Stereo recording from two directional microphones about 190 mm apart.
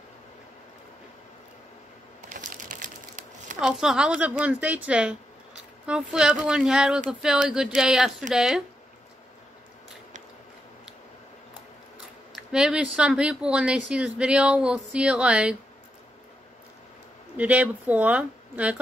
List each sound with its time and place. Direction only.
2.2 s crumpling: 45° right (ahead or behind)
3.6 s a woman's voice: 5° right (ahead or behind)
12.4 s speech: 5° right (ahead or behind)
17.4 s a woman's voice: 10° right (ahead or behind)